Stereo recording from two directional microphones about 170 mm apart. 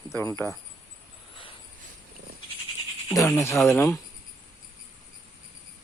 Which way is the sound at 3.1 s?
20° left (ahead or behind).